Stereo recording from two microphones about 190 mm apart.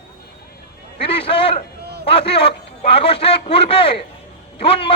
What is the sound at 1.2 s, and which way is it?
A man's voice, 30° left (ahead or behind).